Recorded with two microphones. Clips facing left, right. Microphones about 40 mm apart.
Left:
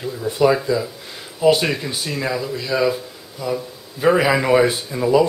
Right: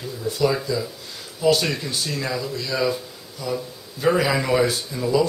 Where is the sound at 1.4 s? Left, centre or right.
Left.